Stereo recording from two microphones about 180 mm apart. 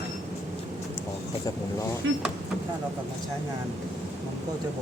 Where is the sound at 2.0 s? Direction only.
90° right.